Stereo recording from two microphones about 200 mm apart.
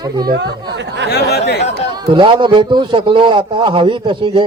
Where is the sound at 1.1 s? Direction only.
55° left (ahead or behind).